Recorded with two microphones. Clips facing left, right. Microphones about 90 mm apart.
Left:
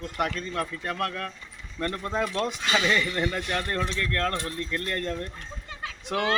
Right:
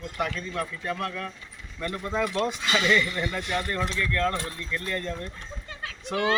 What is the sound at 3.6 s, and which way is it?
Speech, 60° left (ahead or behind).